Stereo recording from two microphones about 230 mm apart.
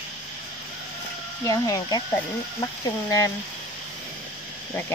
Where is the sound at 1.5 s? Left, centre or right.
Centre.